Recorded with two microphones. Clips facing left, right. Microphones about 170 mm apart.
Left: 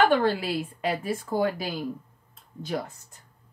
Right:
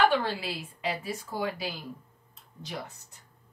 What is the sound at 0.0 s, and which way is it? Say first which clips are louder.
Speech: left 4 dB; 50° left (ahead or behind).